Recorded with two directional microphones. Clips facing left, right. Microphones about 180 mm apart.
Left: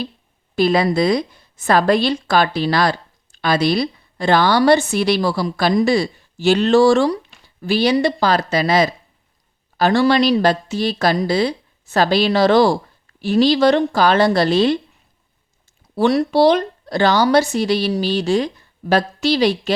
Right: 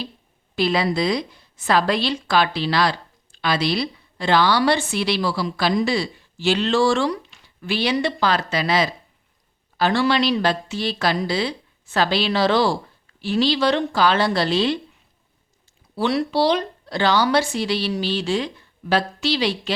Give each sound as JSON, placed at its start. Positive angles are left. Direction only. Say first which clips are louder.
{"t": 0.5, "sound": "a woman's voice", "louder": "left 5 dB", "side_deg": 45}
{"t": 16.0, "sound": "a woman's voice", "louder": "left 6 dB", "side_deg": 45}